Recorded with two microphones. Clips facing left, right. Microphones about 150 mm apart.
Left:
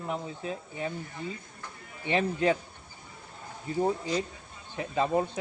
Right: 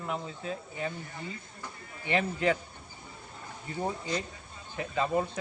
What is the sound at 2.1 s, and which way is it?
Speech, 25° left (ahead or behind).